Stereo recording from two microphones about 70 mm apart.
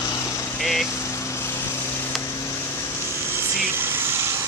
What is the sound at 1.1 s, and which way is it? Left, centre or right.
Vehicle, left.